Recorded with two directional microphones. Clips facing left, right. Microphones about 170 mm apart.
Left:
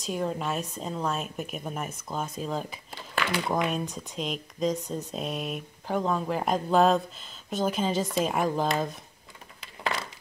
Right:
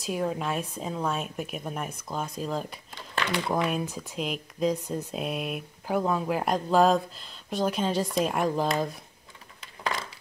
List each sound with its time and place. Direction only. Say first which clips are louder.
0.0 s speech: right 1 dB; centre (ahead or behind)